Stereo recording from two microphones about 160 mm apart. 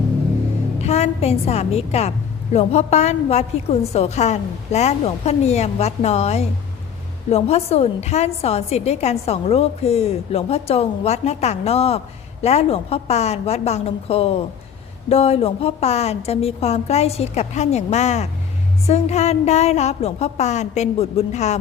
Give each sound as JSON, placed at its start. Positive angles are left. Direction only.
{"t": 0.8, "sound": "a woman's voice", "side_deg": 40}